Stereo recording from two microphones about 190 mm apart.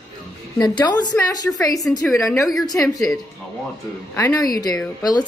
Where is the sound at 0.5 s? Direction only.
20° left (ahead or behind).